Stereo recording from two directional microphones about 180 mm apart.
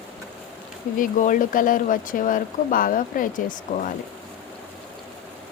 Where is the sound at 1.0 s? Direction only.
45° left (ahead or behind).